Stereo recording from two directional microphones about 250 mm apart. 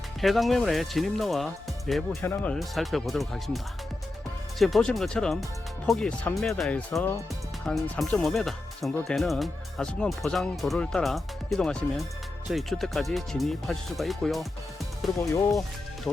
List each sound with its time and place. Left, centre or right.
0.2 s speech: centre